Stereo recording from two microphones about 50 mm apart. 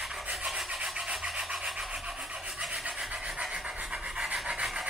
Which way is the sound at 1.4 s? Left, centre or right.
Centre.